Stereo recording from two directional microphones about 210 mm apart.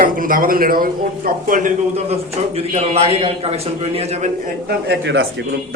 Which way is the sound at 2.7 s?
30° right (ahead or behind).